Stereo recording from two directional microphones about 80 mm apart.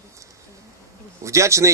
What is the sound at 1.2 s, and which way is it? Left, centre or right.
Speech, right.